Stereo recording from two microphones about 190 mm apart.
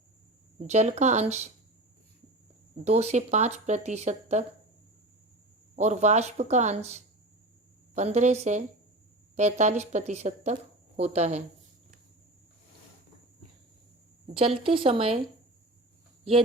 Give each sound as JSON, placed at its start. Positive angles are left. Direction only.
{"t": 0.7, "sound": "speech", "side_deg": -35}
{"t": 2.8, "sound": "speech", "side_deg": -35}
{"t": 5.7, "sound": "speech", "side_deg": -40}
{"t": 14.3, "sound": "speech", "side_deg": -30}